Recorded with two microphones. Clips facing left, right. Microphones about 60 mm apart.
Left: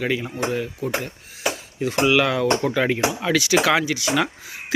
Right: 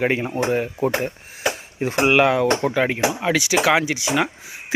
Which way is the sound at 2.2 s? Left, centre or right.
Centre.